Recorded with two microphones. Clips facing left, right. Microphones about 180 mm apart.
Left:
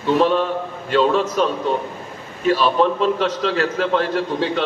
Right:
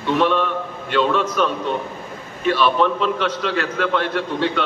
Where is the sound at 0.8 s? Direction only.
35° left (ahead or behind).